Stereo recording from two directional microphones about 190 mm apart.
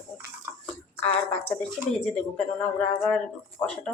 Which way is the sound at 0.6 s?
10° left (ahead or behind).